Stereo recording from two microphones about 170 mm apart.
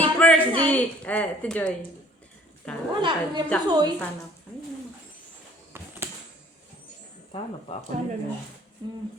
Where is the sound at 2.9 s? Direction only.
30° right (ahead or behind).